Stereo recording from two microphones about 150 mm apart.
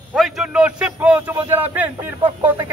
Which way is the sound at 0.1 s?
Centre (ahead or behind).